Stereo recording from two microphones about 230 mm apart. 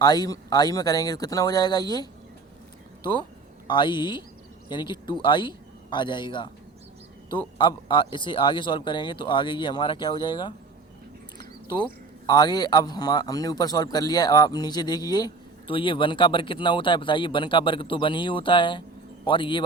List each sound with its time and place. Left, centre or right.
0.0 s speech: centre
3.7 s speech: centre